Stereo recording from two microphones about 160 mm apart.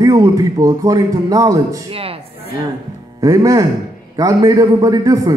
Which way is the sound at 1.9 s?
35° right (ahead or behind).